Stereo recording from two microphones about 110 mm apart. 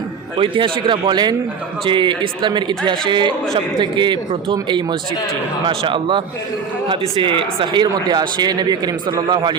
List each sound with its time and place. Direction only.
0.3 s speech: 50° right (ahead or behind)